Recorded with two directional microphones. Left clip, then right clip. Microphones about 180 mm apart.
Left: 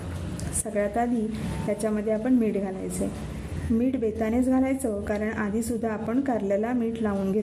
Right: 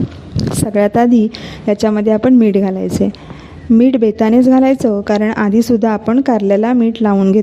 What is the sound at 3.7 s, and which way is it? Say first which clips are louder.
A woman's voice: right 15 dB; 35° right (ahead or behind).